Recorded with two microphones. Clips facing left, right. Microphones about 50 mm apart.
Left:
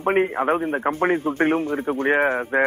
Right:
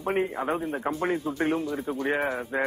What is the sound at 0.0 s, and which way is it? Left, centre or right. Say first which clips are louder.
A man's voice: left 7 dB; left.